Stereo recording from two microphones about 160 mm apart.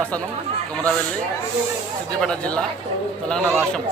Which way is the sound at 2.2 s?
5° left (ahead or behind).